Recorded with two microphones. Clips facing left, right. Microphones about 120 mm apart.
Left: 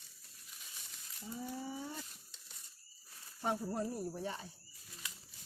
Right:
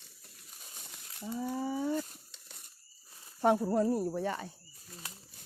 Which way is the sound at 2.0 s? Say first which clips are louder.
Right 13 dB; 55° right (ahead or behind).